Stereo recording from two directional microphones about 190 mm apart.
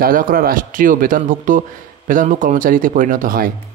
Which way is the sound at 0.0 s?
50° right (ahead or behind).